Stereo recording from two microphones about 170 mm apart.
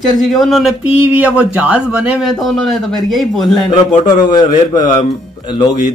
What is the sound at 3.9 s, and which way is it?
A man's voice, 25° left (ahead or behind).